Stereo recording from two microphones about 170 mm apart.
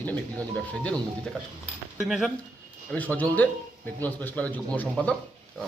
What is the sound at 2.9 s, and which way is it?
A man's voice, 10° left (ahead or behind).